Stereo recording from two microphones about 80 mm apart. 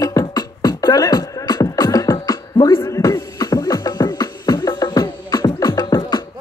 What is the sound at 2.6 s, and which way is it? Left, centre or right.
Music, left.